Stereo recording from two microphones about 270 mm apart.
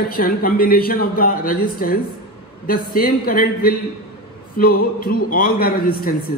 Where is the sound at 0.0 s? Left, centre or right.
Left.